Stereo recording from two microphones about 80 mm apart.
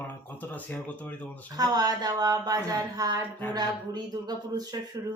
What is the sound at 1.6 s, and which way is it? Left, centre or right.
Speech, right.